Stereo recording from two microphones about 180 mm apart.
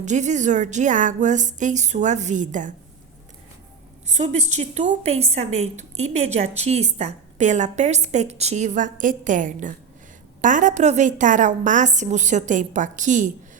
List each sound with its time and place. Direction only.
0.0 s a woman's voice: 40° right (ahead or behind)
4.0 s a woman's voice: 40° right (ahead or behind)